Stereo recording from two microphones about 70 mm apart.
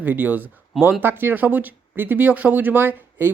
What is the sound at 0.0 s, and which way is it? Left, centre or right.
Speech, right.